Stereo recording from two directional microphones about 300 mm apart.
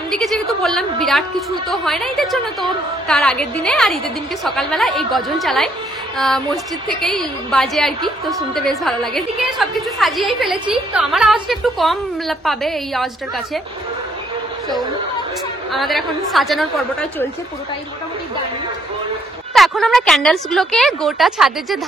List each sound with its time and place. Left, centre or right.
0.1 s a woman's voice: centre
15.7 s a woman's voice: centre
19.5 s a woman's voice: centre